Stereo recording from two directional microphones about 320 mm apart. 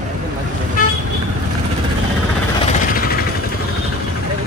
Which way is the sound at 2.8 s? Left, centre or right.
Left.